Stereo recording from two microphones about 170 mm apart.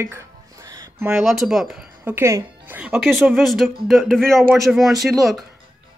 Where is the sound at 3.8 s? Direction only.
Centre (ahead or behind).